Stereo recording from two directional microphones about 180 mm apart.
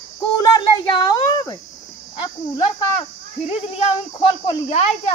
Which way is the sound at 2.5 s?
35° left (ahead or behind).